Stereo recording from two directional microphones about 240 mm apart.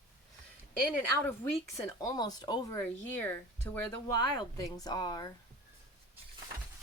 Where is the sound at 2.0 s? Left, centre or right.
Centre.